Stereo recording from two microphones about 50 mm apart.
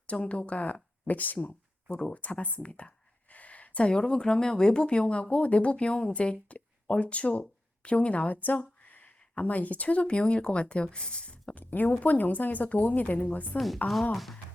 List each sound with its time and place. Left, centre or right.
0.1 s speech: left
2.0 s speech: left
11.5 s speech: left
14.1 s speech: centre